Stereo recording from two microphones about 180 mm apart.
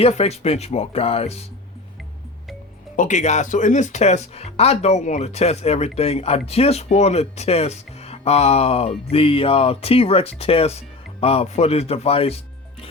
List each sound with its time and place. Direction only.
0.0 s speech: 35° left (ahead or behind)
2.9 s speech: 45° left (ahead or behind)